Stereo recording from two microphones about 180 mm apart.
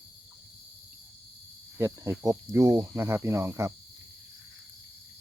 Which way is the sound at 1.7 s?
15° right (ahead or behind).